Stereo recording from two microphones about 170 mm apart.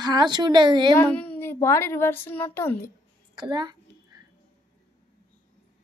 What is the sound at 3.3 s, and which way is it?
Speech, 25° right (ahead or behind).